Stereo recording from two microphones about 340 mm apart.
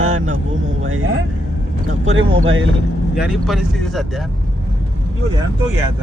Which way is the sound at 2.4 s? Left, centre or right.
Right.